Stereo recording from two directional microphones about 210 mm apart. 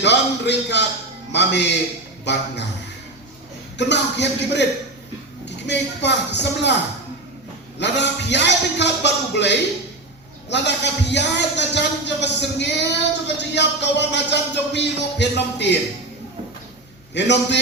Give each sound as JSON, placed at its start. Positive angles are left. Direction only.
{"t": 0.0, "sound": "a sound", "side_deg": 55}
{"t": 1.3, "sound": "speech", "side_deg": 55}
{"t": 3.8, "sound": "speech", "side_deg": 55}
{"t": 5.6, "sound": "speech", "side_deg": 55}
{"t": 7.8, "sound": "speech", "side_deg": 55}
{"t": 17.2, "sound": "speech", "side_deg": 55}